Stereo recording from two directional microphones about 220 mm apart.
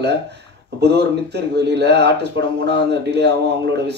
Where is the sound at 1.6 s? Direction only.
50° right (ahead or behind).